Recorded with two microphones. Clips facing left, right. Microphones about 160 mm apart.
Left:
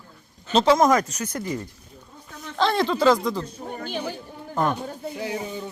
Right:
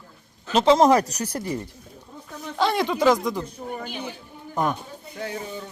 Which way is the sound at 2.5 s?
10° right (ahead or behind).